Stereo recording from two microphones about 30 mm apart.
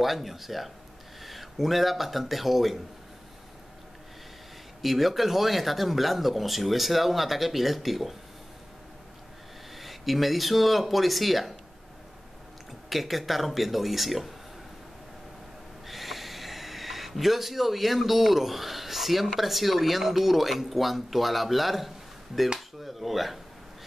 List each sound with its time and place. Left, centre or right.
0.0 s speech: centre
4.8 s speech: centre
9.8 s speech: centre
12.9 s speech: centre
15.9 s speech: centre